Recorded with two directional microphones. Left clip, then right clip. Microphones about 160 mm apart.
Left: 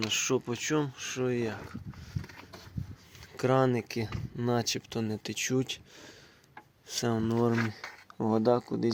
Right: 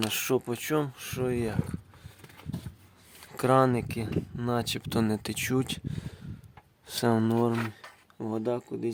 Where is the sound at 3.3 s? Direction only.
30° right (ahead or behind).